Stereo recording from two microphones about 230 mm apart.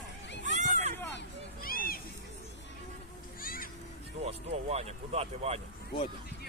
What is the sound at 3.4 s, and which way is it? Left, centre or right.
Children playing, left.